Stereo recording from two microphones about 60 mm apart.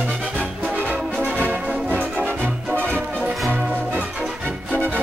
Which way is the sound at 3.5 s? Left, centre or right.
Right.